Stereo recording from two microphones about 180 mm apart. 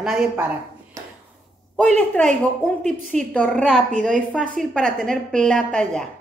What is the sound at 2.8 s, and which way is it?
Speech, 45° right (ahead or behind).